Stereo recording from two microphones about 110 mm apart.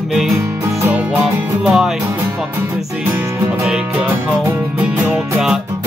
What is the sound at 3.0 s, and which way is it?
Music, 20° right (ahead or behind).